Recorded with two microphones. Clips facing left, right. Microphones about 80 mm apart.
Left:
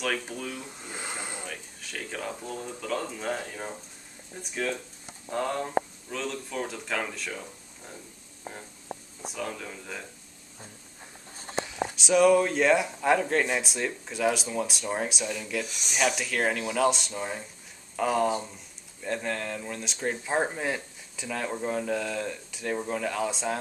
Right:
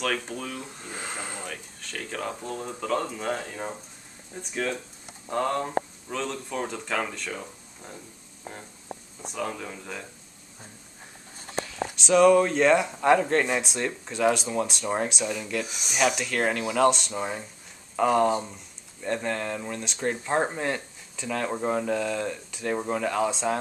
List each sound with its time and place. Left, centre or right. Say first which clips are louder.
0.0 s speech: right 2 dB; centre
0.9 s a sound: right 1 dB; centre
2.8 s speech: right 4 dB; centre
3.5 s speech: right 3 dB; centre
5.3 s speech: right 2 dB; centre
7.3 s speech: right 2 dB; centre
9.5 s speech: right 2 dB; centre
11.9 s speech: right 3 dB; centre
15.6 s speech: right 3 dB; centre
16.2 s speech: right 2 dB; centre
17.1 s speech: right 3 dB; centre
17.9 s speech: right 4 dB; centre